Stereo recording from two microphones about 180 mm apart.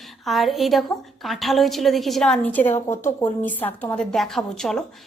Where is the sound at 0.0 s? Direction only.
Centre (ahead or behind).